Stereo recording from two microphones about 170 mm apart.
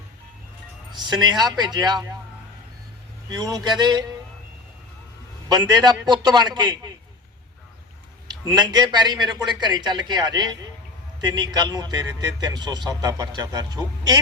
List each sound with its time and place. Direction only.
0.9 s speech: 25° right (ahead or behind)
3.2 s speech: 25° right (ahead or behind)
5.5 s speech: 25° right (ahead or behind)
8.4 s speech: 25° right (ahead or behind)